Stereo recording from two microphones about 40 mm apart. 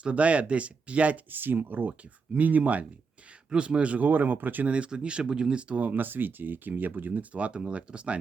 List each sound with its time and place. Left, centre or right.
0.0 s speech: right
1.3 s speech: right
3.5 s speech: right
4.0 s speech: right
4.6 s speech: right
5.8 s speech: right
7.3 s speech: right